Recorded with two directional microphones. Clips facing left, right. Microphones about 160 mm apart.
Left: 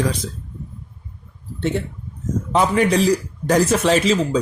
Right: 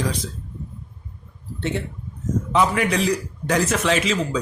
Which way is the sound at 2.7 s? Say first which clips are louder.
Left 5 dB; 35° left (ahead or behind).